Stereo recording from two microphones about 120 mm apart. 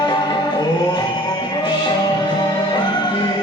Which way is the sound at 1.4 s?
40° left (ahead or behind).